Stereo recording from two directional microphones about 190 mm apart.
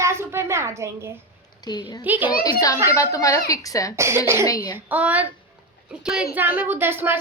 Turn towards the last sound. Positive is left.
turn(degrees=-10)  # may be behind; listen again after turning